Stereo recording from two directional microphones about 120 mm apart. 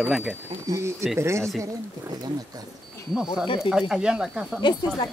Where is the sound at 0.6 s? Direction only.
25° right (ahead or behind).